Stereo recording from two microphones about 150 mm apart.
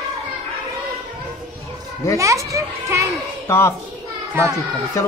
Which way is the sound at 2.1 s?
20° right (ahead or behind).